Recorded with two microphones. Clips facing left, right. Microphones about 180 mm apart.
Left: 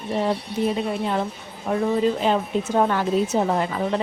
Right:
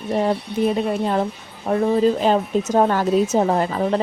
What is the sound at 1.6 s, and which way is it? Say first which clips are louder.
A woman's voice: right 4 dB; 40° right (ahead or behind).